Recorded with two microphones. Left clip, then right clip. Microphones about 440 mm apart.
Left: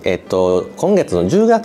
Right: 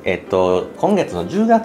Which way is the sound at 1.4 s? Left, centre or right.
Left.